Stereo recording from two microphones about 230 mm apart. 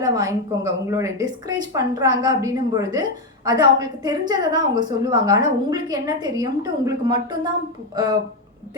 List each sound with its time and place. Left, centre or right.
0.0 s a woman's voice: centre